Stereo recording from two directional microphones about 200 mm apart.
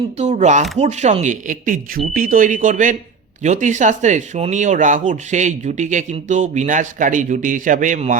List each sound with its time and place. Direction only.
0.2 s speech: 35° right (ahead or behind)